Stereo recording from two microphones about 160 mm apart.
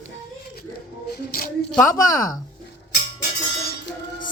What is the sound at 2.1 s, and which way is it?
Speech, 25° left (ahead or behind).